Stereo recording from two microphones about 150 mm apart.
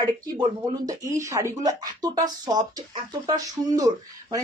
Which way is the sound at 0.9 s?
20° right (ahead or behind).